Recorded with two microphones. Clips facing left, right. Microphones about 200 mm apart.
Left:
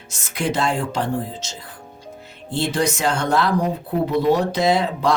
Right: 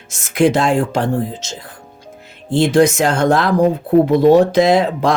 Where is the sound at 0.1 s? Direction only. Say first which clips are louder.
Right 10 dB; 90° right.